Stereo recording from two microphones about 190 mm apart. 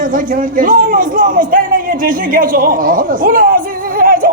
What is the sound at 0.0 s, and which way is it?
A man's voice, 45° right (ahead or behind).